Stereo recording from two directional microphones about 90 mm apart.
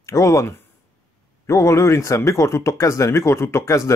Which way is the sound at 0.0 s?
35° left (ahead or behind).